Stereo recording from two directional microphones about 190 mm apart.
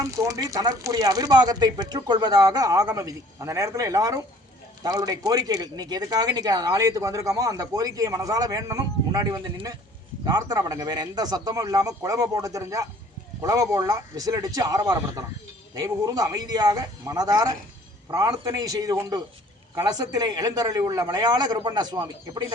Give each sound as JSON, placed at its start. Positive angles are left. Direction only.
{"t": 0.0, "sound": "speech", "side_deg": -15}